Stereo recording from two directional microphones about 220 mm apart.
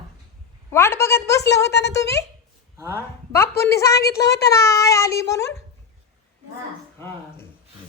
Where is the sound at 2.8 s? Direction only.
10° right (ahead or behind).